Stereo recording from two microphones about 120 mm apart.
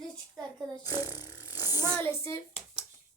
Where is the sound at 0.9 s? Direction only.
15° right (ahead or behind).